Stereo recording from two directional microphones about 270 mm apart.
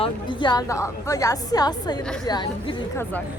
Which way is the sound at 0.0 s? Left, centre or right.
Centre.